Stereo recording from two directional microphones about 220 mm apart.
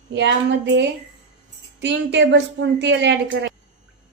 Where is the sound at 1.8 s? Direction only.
55° right (ahead or behind).